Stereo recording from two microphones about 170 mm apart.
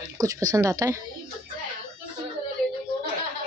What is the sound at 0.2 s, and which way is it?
Speech, 20° right (ahead or behind).